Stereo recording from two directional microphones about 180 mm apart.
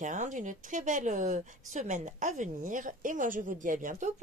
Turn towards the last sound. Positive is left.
turn(degrees=-45)  # may be behind; listen again after turning